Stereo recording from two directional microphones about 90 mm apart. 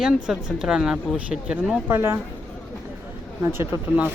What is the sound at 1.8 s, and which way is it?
Speech, 25° right (ahead or behind).